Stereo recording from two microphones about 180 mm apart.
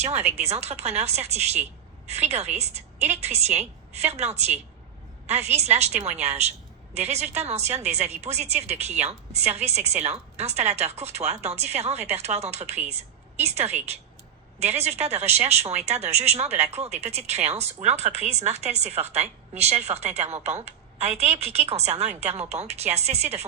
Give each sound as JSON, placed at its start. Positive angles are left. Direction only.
{"t": 0.3, "sound": "speech", "side_deg": -35}